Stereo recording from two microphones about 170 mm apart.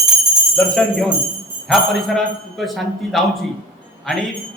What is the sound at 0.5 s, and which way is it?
A man's voice, 5° left (ahead or behind).